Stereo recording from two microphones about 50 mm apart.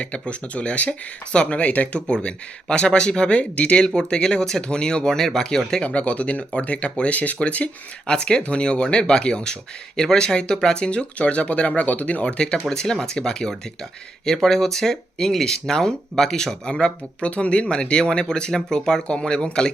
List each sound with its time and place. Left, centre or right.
0.0 s speech: left
2.0 s speech: centre
5.8 s speech: left
12.4 s speech: centre